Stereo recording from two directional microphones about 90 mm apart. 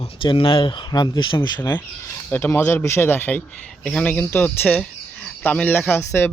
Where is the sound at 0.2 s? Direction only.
75° left (ahead or behind).